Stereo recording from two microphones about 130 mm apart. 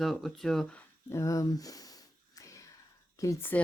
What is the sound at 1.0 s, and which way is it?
Speech, 20° left (ahead or behind).